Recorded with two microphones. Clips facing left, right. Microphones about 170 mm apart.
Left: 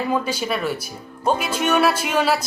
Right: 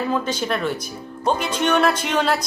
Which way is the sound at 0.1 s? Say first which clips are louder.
Even; 10° left (ahead or behind).